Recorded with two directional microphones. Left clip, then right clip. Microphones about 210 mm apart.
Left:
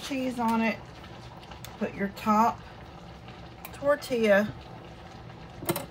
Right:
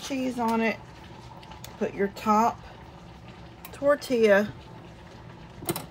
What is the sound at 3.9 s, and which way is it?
Speech, 35° right (ahead or behind).